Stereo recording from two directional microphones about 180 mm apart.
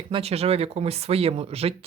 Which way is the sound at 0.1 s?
35° right (ahead or behind).